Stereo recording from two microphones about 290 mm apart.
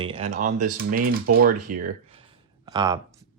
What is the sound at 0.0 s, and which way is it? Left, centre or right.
Speech, centre.